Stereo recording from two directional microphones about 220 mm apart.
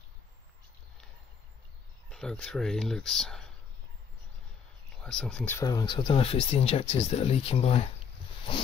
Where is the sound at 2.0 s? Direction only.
5° left (ahead or behind).